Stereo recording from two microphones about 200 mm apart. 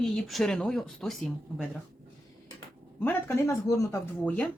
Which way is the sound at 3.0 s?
15° left (ahead or behind).